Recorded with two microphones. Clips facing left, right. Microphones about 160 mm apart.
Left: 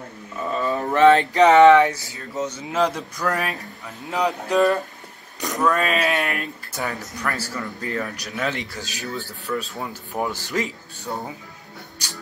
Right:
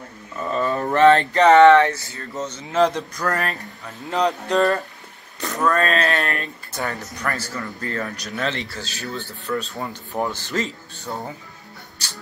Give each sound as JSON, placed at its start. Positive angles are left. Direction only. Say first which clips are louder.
{"t": 0.7, "sound": "speech", "louder": "even", "side_deg": 15}
{"t": 2.3, "sound": "speech", "louder": "right 2 dB", "side_deg": 0}
{"t": 7.5, "sound": "speech", "louder": "even", "side_deg": 15}
{"t": 8.0, "sound": "speech", "louder": "right 2 dB", "side_deg": 0}
{"t": 8.5, "sound": "speech", "louder": "right 1 dB", "side_deg": 15}
{"t": 9.5, "sound": "speech", "louder": "right 1 dB", "side_deg": 0}
{"t": 10.5, "sound": "speech", "louder": "even", "side_deg": 10}